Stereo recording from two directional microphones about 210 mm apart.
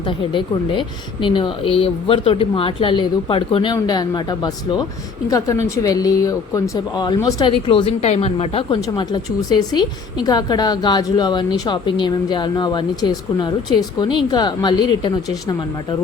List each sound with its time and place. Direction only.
0.1 s a woman's voice: 25° left (ahead or behind)